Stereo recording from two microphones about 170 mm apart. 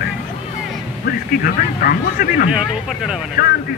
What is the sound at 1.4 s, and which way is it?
Speech, 55° left (ahead or behind).